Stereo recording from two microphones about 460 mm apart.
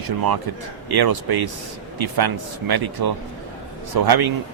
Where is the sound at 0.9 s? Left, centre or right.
Right.